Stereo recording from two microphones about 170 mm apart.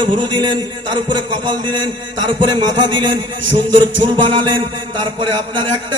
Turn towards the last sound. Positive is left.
turn(degrees=-25)  # may be behind; listen again after turning